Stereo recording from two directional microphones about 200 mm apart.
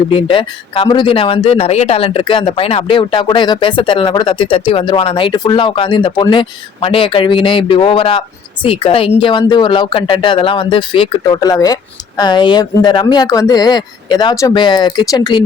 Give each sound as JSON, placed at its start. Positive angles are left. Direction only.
{"t": 0.1, "sound": "speech", "side_deg": 25}